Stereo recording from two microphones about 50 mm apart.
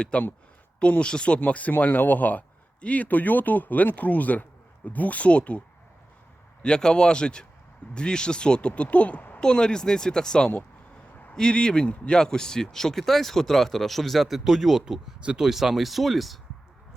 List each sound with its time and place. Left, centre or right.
0.0 s speech: left; by 15.1 s centre
15.2 s speech: centre
15.4 s speech: centre